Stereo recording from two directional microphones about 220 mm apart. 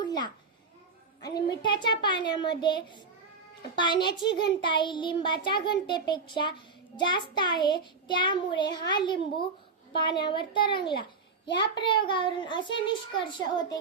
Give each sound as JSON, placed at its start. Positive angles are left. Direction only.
{"t": 0.0, "sound": "babbling", "side_deg": 20}
{"t": 1.2, "sound": "a woman's voice", "side_deg": 20}
{"t": 2.6, "sound": "child singing", "side_deg": 20}
{"t": 4.0, "sound": "child singing", "side_deg": 20}